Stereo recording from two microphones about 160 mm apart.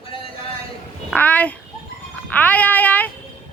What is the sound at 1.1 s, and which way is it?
Speech, 10° left (ahead or behind).